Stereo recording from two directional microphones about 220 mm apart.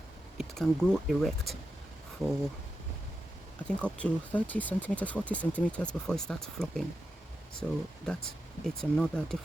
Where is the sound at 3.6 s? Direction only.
5° left (ahead or behind).